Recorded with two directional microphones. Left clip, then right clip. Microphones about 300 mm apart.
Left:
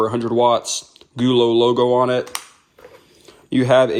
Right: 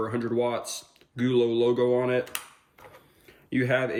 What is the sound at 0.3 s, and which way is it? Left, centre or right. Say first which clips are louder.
Speech: left 13 dB; centre.